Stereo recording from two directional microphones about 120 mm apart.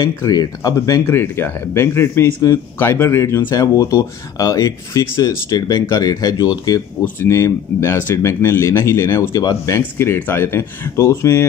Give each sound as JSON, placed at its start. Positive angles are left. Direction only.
{"t": 0.0, "sound": "speech", "side_deg": 35}
{"t": 9.8, "sound": "speech", "side_deg": 20}